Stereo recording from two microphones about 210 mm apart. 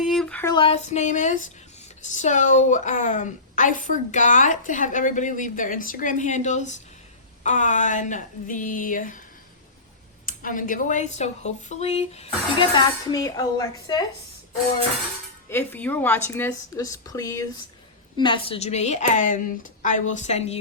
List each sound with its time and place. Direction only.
0.0 s a sound: centre (ahead or behind)
0.5 s a woman's voice: 25° left (ahead or behind)
10.2 s speech: 40° left (ahead or behind); by 14.0 s 15° left (ahead or behind)
15.4 s a woman's voice: 10° left (ahead or behind); by 20.6 s 30° left (ahead or behind)